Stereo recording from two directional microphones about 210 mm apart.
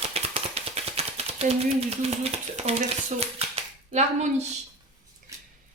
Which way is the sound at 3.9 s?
35° right (ahead or behind).